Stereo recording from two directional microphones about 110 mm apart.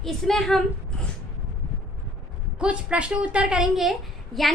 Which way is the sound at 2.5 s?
10° right (ahead or behind).